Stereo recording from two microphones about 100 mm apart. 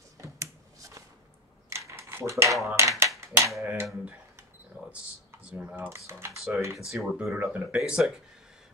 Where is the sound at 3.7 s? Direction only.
20° right (ahead or behind).